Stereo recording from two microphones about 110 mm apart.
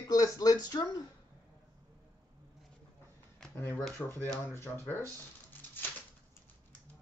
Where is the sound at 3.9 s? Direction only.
20° left (ahead or behind).